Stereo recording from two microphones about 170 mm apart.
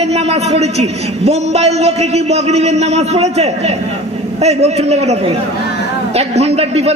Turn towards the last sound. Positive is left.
turn(degrees=-35)  # may be behind; listen again after turning